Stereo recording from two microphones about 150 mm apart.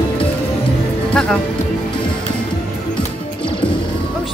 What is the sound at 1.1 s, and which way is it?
Music, 5° left (ahead or behind).